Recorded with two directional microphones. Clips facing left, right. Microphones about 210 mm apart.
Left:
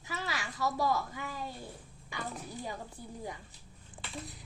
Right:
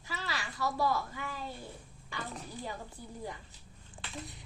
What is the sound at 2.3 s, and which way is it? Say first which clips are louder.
Speech: left 1 dB; 10° left (ahead or behind).